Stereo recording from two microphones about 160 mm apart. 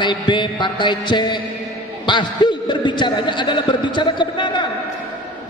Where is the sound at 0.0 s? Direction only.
30° left (ahead or behind).